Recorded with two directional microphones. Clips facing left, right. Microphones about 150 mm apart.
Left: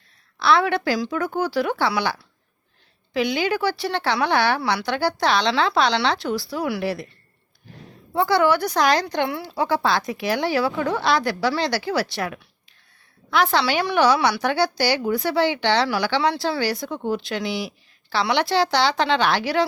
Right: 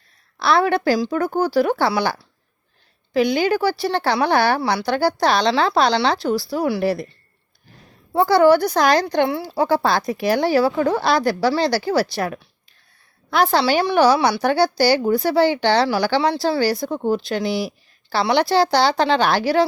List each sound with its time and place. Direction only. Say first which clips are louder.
0.3 s speech: right 2 dB; 40° right (ahead or behind)
8.1 s speech: right 5 dB; 40° right (ahead or behind)